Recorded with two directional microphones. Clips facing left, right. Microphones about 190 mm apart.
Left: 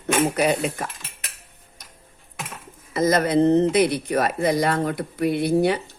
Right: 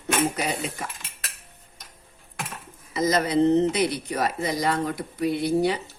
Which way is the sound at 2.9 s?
55° left (ahead or behind).